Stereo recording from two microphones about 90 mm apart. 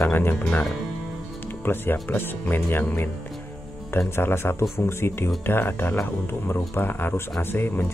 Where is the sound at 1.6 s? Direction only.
25° left (ahead or behind).